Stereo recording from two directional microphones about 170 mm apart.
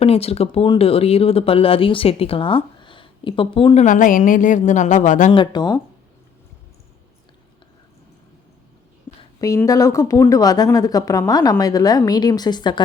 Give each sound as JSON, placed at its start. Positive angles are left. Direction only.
{"t": 0.0, "sound": "speech", "side_deg": 35}
{"t": 3.8, "sound": "a woman's voice", "side_deg": 50}
{"t": 5.3, "sound": "speech", "side_deg": 25}
{"t": 9.4, "sound": "speech", "side_deg": 20}